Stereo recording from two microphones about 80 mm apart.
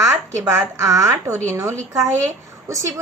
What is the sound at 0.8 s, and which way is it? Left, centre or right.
Speech, right.